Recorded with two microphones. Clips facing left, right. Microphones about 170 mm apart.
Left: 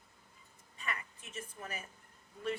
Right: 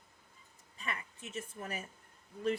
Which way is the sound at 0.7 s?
30° right (ahead or behind).